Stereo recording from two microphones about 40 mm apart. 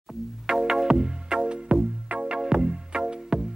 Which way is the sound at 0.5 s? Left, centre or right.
Centre.